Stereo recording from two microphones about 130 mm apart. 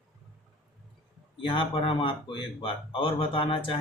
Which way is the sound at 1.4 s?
40° left (ahead or behind).